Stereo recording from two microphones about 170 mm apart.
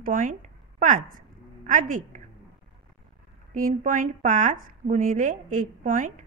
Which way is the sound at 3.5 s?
50° right (ahead or behind).